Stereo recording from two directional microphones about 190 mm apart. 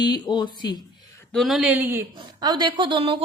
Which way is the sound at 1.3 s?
Centre (ahead or behind).